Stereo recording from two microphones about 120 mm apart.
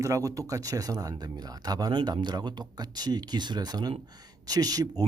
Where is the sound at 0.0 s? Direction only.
25° right (ahead or behind).